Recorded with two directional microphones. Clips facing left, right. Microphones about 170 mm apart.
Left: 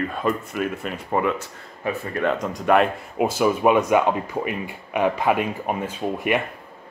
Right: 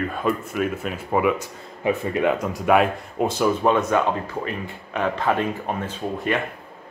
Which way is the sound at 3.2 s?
5° left (ahead or behind).